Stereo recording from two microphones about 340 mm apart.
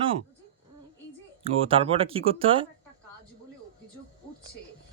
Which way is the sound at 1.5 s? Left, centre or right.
Centre.